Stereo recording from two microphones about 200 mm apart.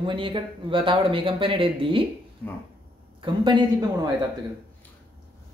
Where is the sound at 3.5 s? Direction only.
20° right (ahead or behind).